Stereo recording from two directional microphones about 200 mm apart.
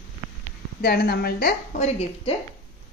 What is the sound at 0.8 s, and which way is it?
Speech, 50° left (ahead or behind).